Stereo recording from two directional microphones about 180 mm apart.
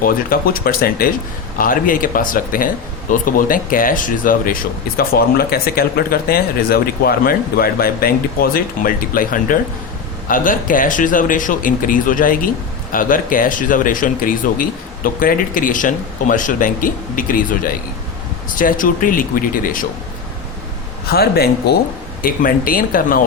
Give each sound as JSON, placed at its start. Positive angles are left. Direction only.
{"t": 0.0, "sound": "speech", "side_deg": 55}
{"t": 21.1, "sound": "speech", "side_deg": 60}